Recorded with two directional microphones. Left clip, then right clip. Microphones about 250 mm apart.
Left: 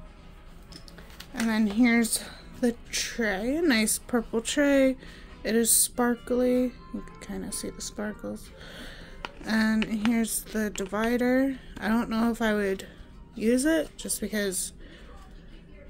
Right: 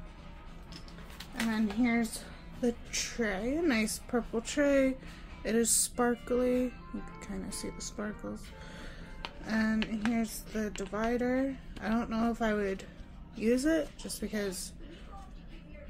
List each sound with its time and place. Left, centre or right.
1.3 s a woman's voice: left